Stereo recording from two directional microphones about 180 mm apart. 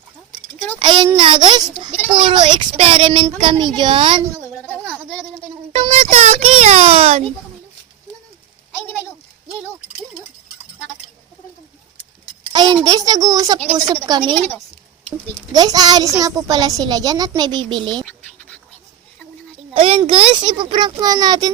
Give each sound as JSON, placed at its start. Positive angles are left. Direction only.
{"t": 0.8, "sound": "a woman's voice", "side_deg": -25}
{"t": 4.5, "sound": "a sound", "side_deg": 10}
{"t": 4.8, "sound": "a sound", "side_deg": -5}
{"t": 5.9, "sound": "a child's voice", "side_deg": -35}
{"t": 9.5, "sound": "a sound", "side_deg": -10}
{"t": 12.8, "sound": "a woman's voice", "side_deg": -20}
{"t": 14.3, "sound": "a woman's voice", "side_deg": 10}
{"t": 15.5, "sound": "a woman's voice", "side_deg": -20}
{"t": 18.0, "sound": "scratch", "side_deg": 5}
{"t": 19.7, "sound": "a child's voice", "side_deg": -30}